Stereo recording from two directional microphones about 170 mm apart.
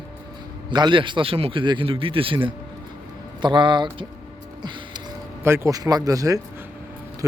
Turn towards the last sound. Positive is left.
turn(degrees=-20)  # may be behind; listen again after turning